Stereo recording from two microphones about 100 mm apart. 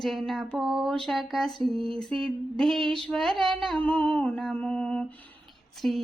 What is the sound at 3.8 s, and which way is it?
Lullaby, 10° left (ahead or behind).